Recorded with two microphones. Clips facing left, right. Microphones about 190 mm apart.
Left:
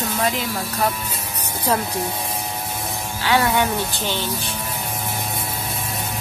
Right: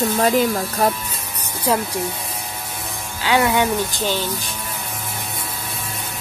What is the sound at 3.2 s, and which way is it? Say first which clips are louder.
Speech: right 2 dB; 15° right (ahead or behind).